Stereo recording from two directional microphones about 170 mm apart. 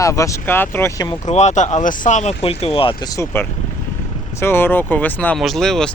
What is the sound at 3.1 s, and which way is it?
Speech, 10° left (ahead or behind).